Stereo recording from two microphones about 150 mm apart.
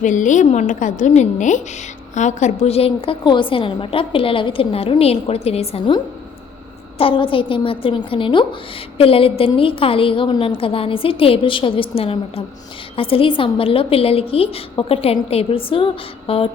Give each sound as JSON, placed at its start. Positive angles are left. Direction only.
{"t": 0.0, "sound": "a woman's voice", "side_deg": 55}
{"t": 7.0, "sound": "a woman's voice", "side_deg": 35}